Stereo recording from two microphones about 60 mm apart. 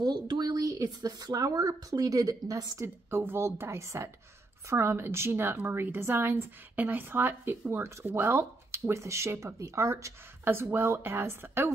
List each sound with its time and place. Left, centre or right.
0.4 s speech: right
3.1 s a woman's voice: right
10.4 s a woman's voice: right